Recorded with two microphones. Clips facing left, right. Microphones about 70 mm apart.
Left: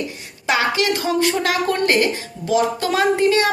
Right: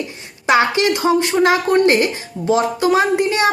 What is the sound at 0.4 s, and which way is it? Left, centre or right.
A woman's voice, right.